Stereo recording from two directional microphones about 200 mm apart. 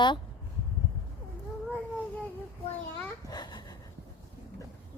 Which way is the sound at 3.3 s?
20° left (ahead or behind).